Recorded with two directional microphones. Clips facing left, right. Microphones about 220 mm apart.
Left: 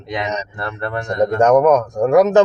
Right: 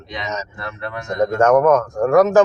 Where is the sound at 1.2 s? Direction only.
15° left (ahead or behind).